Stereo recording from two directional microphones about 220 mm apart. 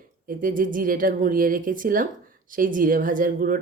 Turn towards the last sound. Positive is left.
turn(degrees=-40)  # may be behind; listen again after turning